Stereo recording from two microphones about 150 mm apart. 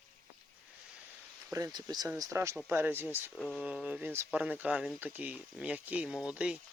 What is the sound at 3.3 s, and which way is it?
Speech, centre (ahead or behind).